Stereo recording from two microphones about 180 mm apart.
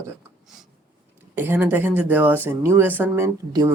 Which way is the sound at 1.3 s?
10° right (ahead or behind).